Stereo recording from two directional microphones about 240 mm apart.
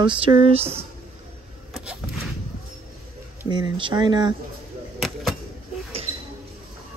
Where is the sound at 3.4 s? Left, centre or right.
Centre.